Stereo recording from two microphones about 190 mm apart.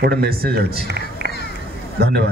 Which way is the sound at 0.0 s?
55° right (ahead or behind).